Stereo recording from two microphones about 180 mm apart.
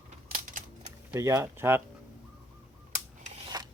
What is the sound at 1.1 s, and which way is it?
Speech, 15° right (ahead or behind).